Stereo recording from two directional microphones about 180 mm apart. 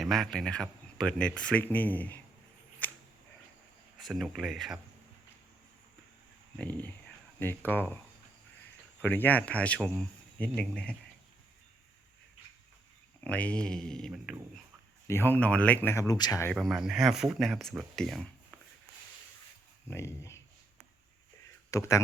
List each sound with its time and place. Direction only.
0.0 s speech: centre (ahead or behind)
2.8 s a sound: 10° left (ahead or behind)
4.0 s speech: centre (ahead or behind)
6.6 s speech: 10° left (ahead or behind)
13.2 s speech: 5° left (ahead or behind)
15.0 s speech: 15° left (ahead or behind)
16.5 s speech: centre (ahead or behind)
19.9 s speech: 15° left (ahead or behind)
21.7 s speech: 15° left (ahead or behind)